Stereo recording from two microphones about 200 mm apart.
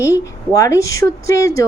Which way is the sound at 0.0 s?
15° left (ahead or behind).